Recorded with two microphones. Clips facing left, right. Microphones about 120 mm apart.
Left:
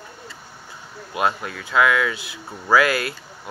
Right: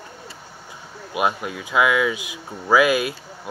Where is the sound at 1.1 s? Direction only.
15° right (ahead or behind).